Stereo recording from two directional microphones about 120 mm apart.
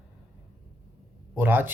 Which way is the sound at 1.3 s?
15° right (ahead or behind).